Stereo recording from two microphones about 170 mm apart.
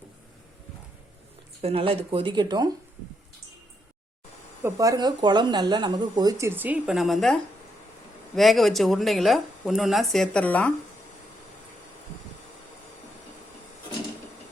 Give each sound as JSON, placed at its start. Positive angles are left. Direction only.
{"t": 1.6, "sound": "speech", "side_deg": -30}
{"t": 4.6, "sound": "speech", "side_deg": -20}
{"t": 8.4, "sound": "speech", "side_deg": 0}